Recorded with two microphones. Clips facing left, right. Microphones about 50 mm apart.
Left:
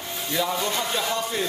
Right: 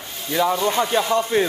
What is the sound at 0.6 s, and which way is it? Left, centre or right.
Speech, right.